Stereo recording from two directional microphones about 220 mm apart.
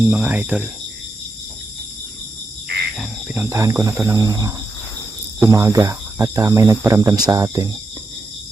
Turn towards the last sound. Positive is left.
turn(degrees=-15)  # may be behind; listen again after turning